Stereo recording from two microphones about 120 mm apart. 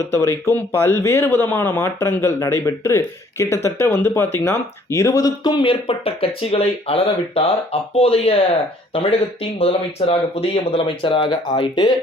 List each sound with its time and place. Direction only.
0.0 s speech: 25° left (ahead or behind)